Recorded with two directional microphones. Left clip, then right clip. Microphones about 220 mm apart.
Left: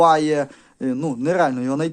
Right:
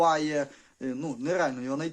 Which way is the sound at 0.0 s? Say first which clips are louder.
Left 9 dB; 50° left (ahead or behind).